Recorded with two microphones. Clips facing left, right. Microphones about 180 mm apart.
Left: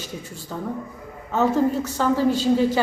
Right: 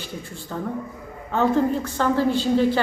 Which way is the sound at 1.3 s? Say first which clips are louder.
Even; 5° left (ahead or behind).